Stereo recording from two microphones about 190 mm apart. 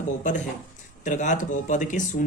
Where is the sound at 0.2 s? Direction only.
40° left (ahead or behind).